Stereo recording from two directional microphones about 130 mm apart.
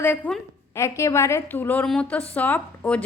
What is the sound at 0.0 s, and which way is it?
A woman's voice, 15° left (ahead or behind).